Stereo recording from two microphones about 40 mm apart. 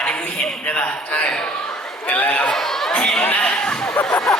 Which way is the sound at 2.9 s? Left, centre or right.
Left.